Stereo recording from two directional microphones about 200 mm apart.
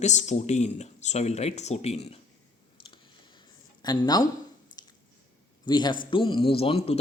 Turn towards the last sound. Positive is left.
turn(degrees=30)  # may be behind; listen again after turning